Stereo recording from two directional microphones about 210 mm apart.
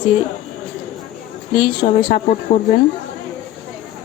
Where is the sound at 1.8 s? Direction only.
35° left (ahead or behind).